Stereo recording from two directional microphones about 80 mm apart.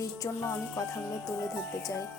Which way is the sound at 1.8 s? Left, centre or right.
Left.